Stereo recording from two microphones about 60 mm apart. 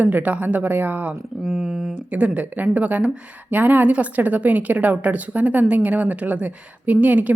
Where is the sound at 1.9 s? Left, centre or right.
Right.